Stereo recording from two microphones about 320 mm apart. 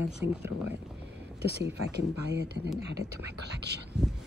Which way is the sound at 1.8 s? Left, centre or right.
Right.